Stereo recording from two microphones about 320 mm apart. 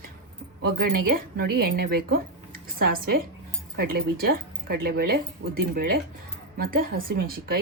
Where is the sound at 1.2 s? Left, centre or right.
Right.